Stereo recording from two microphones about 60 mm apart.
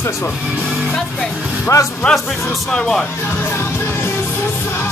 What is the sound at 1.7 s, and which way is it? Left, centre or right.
Speech, left.